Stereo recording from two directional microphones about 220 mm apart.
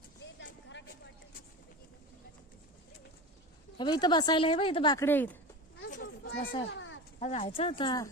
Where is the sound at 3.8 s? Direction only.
20° left (ahead or behind).